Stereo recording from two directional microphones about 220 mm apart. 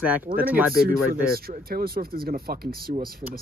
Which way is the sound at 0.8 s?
45° right (ahead or behind).